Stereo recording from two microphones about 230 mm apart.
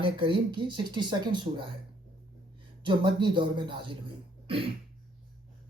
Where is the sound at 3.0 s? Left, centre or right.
Centre.